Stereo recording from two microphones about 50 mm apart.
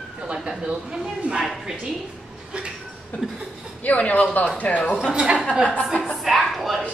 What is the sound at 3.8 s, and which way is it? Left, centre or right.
Speech, left.